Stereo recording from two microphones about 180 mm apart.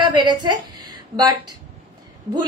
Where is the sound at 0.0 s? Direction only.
25° right (ahead or behind).